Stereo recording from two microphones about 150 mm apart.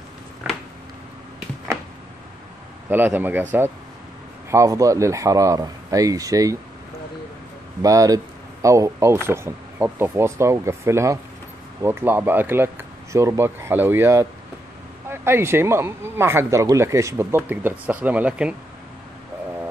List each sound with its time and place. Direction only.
2.9 s speech: 15° right (ahead or behind)
7.8 s speech: 25° right (ahead or behind)